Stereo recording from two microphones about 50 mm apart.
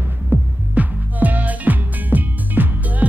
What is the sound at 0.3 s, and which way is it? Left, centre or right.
Music, right.